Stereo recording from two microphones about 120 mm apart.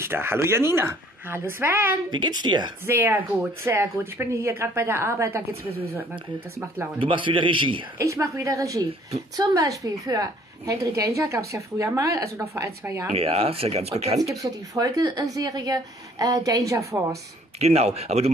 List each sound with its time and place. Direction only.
0.0 s a woman's voice: 20° right (ahead or behind)
2.0 s a woman's voice: 40° right (ahead or behind)
2.9 s a woman's voice: 20° right (ahead or behind)
7.0 s a man's voice: 45° right (ahead or behind)
8.0 s a woman's voice: 25° right (ahead or behind)
13.1 s speech: 60° right (ahead or behind)
14.2 s a woman's voice: 30° right (ahead or behind)
17.6 s speech: 60° right (ahead or behind)